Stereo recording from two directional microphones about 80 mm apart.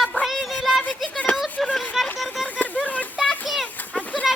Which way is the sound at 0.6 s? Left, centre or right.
Centre.